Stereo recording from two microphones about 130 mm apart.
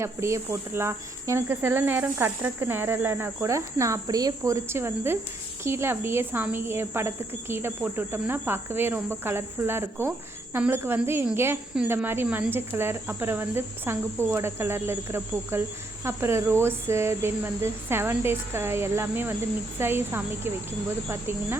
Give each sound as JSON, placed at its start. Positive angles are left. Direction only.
{"t": 0.0, "sound": "speech", "side_deg": -20}